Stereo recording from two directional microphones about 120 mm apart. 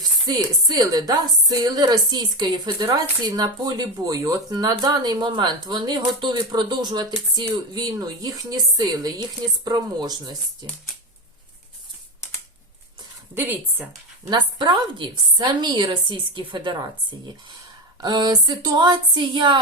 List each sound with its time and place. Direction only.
0.0 s a woman's voice: 35° right (ahead or behind)
13.3 s speech: 20° right (ahead or behind)
14.3 s a woman's voice: 40° right (ahead or behind)
18.0 s a woman's voice: 35° right (ahead or behind)